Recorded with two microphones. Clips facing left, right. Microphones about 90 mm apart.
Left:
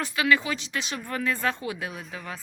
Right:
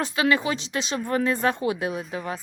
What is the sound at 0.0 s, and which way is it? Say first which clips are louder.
Speech: right 2 dB; 25° right (ahead or behind).